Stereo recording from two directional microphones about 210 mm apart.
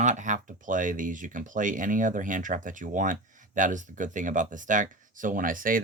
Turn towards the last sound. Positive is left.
turn(degrees=-40)  # may be behind; listen again after turning